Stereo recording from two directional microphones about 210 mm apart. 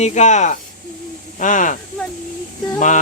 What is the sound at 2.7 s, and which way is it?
Music, 35° left (ahead or behind).